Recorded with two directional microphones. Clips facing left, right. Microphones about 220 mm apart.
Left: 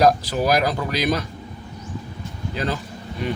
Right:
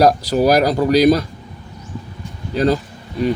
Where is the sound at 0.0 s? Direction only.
40° right (ahead or behind).